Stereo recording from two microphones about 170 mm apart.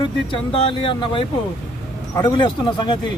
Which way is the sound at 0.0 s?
30° left (ahead or behind).